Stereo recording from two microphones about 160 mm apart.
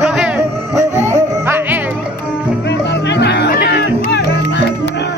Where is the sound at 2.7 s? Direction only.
90° left.